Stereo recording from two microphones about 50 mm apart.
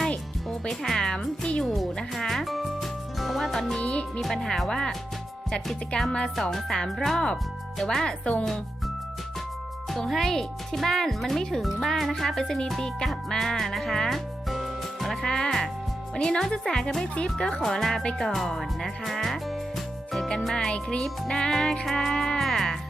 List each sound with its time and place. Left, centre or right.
0.8 s music: centre
1.6 s speech: centre
3.8 s speech: left
4.2 s speech: centre
6.1 s music: centre
6.3 s music: centre; by 8.4 s left
9.9 s speech: centre
16.1 s music: centre
18.5 s speech: centre
20.1 s music: centre